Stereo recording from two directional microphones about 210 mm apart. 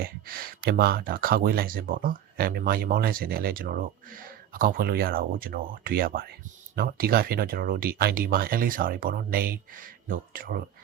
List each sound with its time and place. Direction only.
0.0 s speech: 45° right (ahead or behind)